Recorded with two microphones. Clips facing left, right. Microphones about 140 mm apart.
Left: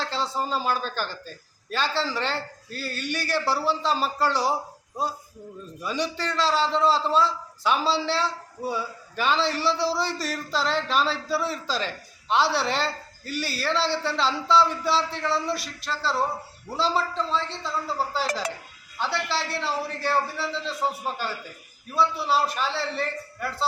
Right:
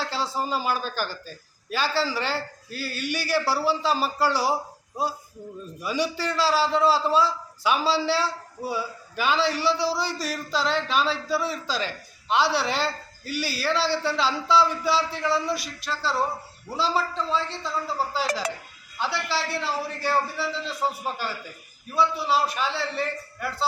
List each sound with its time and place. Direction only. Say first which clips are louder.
0.0 s a man's voice: even; 5° right (ahead or behind)
5.8 s a man's voice: right 2 dB; 5° right (ahead or behind)